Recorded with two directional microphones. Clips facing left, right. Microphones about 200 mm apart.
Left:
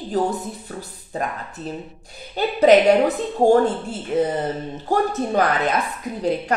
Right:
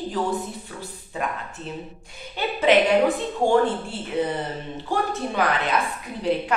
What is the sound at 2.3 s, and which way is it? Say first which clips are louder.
Speech: left 5 dB; 40° left (ahead or behind).